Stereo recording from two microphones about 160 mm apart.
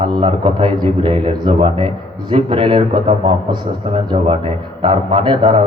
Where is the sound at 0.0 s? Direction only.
30° right (ahead or behind).